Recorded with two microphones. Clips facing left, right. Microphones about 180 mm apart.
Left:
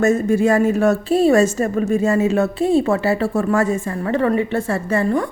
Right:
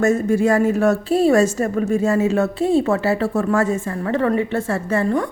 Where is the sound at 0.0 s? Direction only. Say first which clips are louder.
Left 1 dB; 20° left (ahead or behind).